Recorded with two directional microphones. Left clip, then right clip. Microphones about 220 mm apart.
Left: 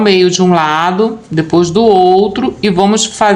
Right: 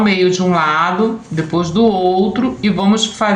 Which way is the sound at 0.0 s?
50° left (ahead or behind).